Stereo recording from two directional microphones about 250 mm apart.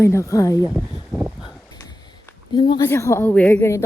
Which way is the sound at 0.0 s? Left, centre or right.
Centre.